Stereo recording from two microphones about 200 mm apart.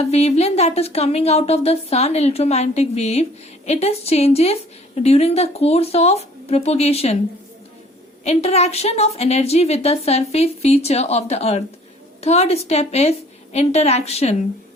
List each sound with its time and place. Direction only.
0.0 s a woman's voice: 30° left (ahead or behind)
8.2 s a woman's voice: 30° left (ahead or behind)